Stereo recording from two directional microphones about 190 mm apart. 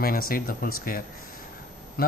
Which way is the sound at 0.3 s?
50° left (ahead or behind).